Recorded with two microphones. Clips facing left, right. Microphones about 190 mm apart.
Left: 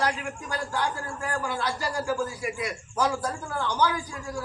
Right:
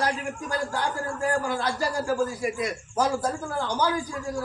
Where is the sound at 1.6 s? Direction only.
45° right (ahead or behind).